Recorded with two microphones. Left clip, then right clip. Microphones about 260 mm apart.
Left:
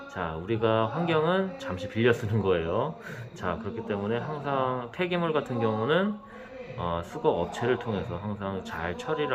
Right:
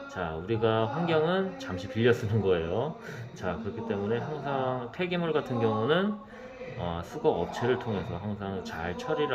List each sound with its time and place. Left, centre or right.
0.2 s speech: centre